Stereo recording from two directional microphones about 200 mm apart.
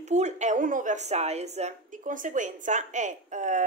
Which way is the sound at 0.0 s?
35° right (ahead or behind).